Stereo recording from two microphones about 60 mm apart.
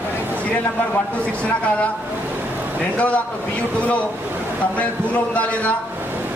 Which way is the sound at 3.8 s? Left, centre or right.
Left.